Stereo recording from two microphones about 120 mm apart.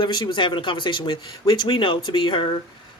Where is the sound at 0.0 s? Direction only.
40° left (ahead or behind).